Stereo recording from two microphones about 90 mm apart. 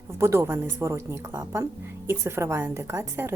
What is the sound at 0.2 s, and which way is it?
Speech, 30° right (ahead or behind).